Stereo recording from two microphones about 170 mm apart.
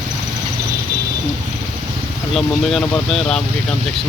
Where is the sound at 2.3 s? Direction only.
Centre (ahead or behind).